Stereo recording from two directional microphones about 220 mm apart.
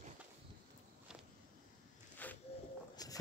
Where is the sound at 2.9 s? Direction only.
15° left (ahead or behind).